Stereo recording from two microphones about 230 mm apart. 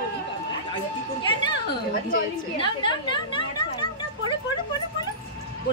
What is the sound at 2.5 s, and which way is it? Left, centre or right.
Speech, left.